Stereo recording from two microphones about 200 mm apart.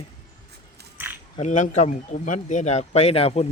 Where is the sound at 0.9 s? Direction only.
10° right (ahead or behind).